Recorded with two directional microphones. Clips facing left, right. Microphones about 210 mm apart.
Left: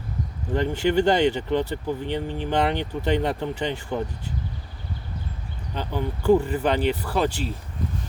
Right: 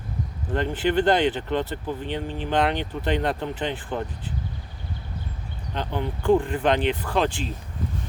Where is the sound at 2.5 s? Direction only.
10° left (ahead or behind).